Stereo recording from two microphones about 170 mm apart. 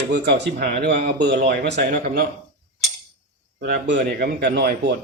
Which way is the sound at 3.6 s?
80° right.